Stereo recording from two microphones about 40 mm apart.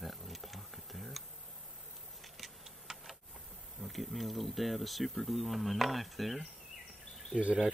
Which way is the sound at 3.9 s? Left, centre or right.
Centre.